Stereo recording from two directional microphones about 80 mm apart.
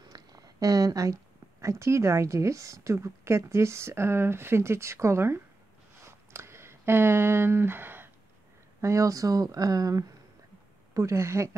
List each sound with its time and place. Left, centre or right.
0.1 s a woman's voice: right
6.0 s a sound: right
8.8 s speech: right
11.0 s a woman's voice: right